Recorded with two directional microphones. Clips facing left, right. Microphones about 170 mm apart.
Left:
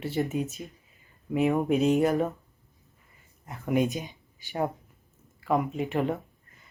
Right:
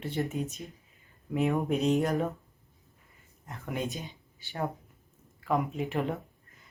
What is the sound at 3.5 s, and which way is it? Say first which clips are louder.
Speech: left 9 dB; 15° left (ahead or behind).